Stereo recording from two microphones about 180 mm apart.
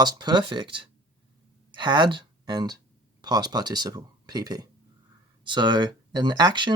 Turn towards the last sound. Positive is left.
turn(degrees=-25)  # may be behind; listen again after turning